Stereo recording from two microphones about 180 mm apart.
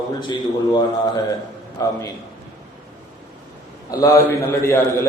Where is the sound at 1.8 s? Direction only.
20° left (ahead or behind).